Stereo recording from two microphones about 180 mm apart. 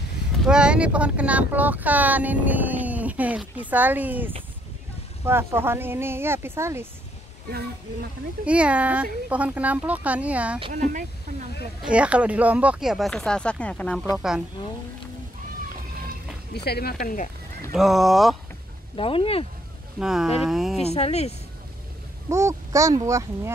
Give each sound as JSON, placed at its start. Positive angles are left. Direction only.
{"t": 0.5, "sound": "speech", "side_deg": -5}
{"t": 8.5, "sound": "speech", "side_deg": -5}
{"t": 10.7, "sound": "speech", "side_deg": -45}
{"t": 11.8, "sound": "speech", "side_deg": -5}
{"t": 16.6, "sound": "speech", "side_deg": 60}
{"t": 17.7, "sound": "speech", "side_deg": 0}
{"t": 18.9, "sound": "speech", "side_deg": 30}
{"t": 20.0, "sound": "speech", "side_deg": -5}
{"t": 20.8, "sound": "speech", "side_deg": 35}
{"t": 22.3, "sound": "speech", "side_deg": -15}